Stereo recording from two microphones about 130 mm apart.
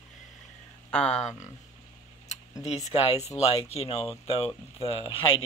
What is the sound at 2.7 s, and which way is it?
Speech, 55° left (ahead or behind).